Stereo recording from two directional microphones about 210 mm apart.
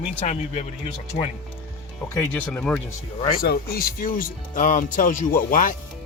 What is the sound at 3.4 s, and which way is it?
Speech, 45° left (ahead or behind).